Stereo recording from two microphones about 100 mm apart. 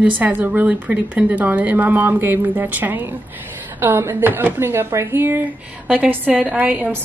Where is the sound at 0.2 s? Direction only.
15° right (ahead or behind).